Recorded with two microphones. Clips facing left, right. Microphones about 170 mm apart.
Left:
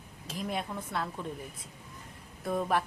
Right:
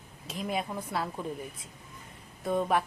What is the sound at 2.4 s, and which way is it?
Speech, centre (ahead or behind).